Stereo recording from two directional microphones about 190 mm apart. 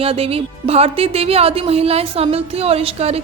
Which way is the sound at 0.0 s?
30° right (ahead or behind).